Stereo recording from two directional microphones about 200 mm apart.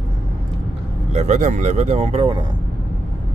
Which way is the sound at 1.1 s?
35° right (ahead or behind).